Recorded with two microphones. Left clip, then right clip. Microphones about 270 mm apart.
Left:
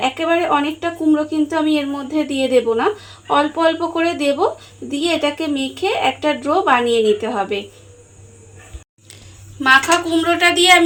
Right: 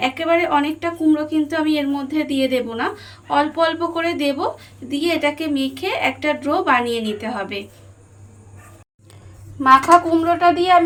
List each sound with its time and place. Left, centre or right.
0.0 s speech: centre
9.9 s speech: right